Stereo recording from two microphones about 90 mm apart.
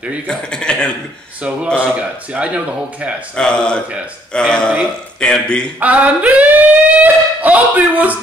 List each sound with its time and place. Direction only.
0.3 s a man's voice: 10° left (ahead or behind)
2.0 s speech: 15° right (ahead or behind)
3.3 s a man's voice: 10° left (ahead or behind)
5.8 s a sound: 15° right (ahead or behind)